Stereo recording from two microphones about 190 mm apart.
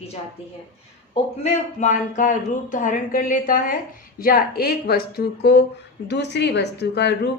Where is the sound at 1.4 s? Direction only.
40° left (ahead or behind).